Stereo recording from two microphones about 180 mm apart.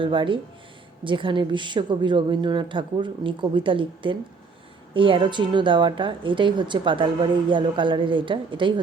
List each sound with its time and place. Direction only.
0.0 s a woman's voice: 30° right (ahead or behind)